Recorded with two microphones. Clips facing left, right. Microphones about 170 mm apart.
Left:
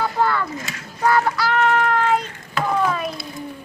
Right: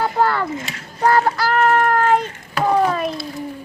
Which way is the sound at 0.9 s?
35° right (ahead or behind).